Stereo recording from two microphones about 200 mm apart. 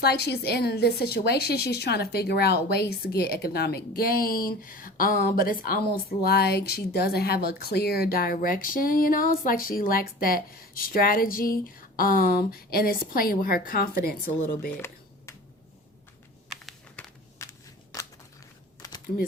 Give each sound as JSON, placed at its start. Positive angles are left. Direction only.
{"t": 0.0, "sound": "a woman's voice", "side_deg": 55}
{"t": 15.3, "sound": "finger snapping", "side_deg": 15}
{"t": 16.5, "sound": "a sound", "side_deg": 0}
{"t": 17.4, "sound": "scissors", "side_deg": 15}
{"t": 18.8, "sound": "typing", "side_deg": 20}